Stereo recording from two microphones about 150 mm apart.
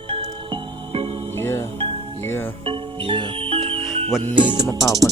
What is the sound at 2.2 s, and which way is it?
Music, 15° left (ahead or behind).